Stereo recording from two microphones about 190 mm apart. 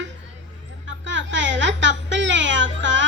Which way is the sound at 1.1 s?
75° right (ahead or behind).